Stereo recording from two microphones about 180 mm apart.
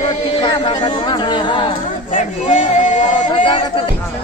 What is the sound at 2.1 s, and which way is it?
Speech, 40° left (ahead or behind).